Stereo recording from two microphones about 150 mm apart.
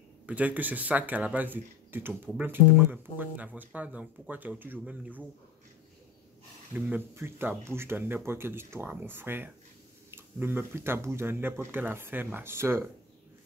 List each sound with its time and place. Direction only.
0.3 s speech: 10° right (ahead or behind)
7.2 s speech: 15° right (ahead or behind)